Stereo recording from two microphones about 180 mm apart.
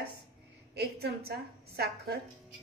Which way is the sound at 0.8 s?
60° right (ahead or behind).